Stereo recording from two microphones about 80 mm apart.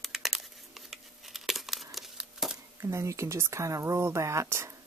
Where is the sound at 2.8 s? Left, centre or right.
Right.